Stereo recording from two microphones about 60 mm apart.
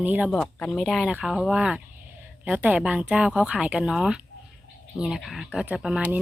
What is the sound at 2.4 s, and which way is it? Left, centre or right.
Speech, right.